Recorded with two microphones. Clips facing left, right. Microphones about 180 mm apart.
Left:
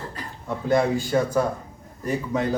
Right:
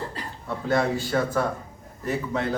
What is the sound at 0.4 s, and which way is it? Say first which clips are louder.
A man's voice: left 3 dB; 15° left (ahead or behind).